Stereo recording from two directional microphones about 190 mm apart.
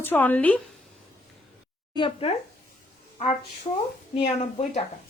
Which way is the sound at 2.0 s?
30° left (ahead or behind).